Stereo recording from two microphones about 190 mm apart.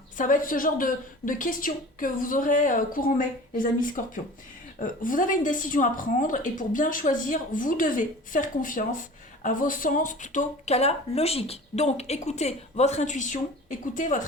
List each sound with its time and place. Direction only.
0.2 s a woman's voice: 45° left (ahead or behind)